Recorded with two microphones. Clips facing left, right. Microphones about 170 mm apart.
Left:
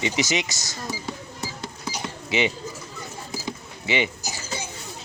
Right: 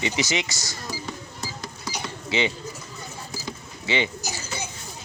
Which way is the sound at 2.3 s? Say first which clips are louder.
Left 1 dB; 20° left (ahead or behind).